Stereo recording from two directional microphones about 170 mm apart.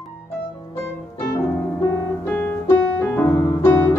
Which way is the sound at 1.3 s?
15° left (ahead or behind).